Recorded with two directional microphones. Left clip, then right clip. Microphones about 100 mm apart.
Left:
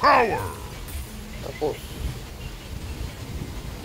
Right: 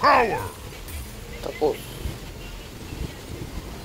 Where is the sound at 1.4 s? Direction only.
30° right (ahead or behind).